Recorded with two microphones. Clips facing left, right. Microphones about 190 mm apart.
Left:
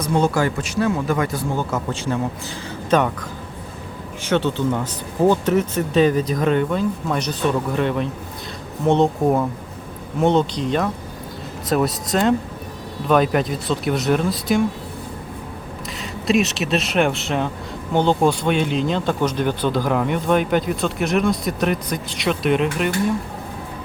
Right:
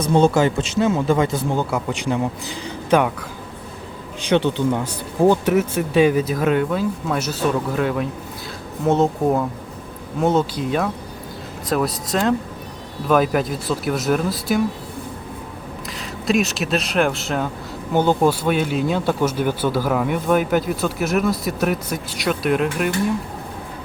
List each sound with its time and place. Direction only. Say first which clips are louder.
0.0 s a man's voice: right 3 dB; 25° right (ahead or behind); by 14.6 s centre (ahead or behind)
16.0 s speech: left 1 dB; centre (ahead or behind)